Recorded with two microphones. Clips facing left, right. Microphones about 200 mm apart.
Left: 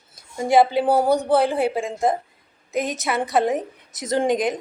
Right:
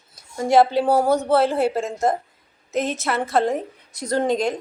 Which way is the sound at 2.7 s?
15° left (ahead or behind).